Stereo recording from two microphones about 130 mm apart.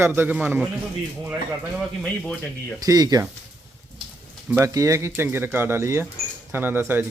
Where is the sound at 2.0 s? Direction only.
10° left (ahead or behind).